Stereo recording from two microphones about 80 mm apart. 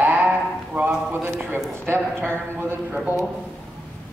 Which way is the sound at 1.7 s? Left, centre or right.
Right.